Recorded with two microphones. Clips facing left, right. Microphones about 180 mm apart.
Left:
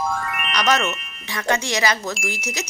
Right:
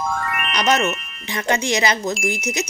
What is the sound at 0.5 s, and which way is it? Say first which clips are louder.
Speech: right 2 dB; 20° right (ahead or behind).